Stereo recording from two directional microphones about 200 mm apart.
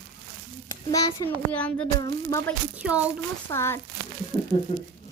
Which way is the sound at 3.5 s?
15° left (ahead or behind).